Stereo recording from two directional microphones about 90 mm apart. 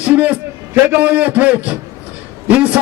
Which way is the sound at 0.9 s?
15° right (ahead or behind).